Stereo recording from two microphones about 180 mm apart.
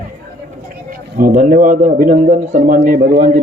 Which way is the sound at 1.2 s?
50° right (ahead or behind).